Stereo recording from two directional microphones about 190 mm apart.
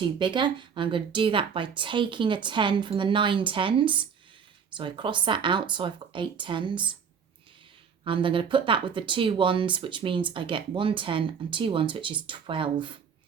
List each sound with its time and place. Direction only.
0.0 s speech: 25° right (ahead or behind)
8.0 s speech: 25° right (ahead or behind)